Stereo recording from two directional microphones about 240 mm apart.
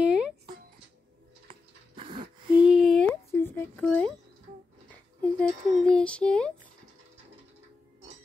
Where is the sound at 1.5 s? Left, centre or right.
Right.